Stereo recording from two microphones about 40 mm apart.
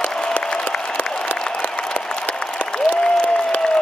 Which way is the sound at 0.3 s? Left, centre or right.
Left.